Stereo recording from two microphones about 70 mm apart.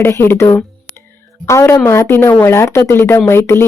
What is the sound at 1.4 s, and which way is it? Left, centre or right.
A woman's voice, left.